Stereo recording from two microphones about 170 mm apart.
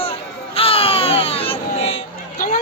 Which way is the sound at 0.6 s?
35° left (ahead or behind).